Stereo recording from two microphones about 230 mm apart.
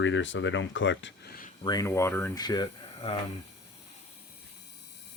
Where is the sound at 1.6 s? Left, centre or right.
Centre.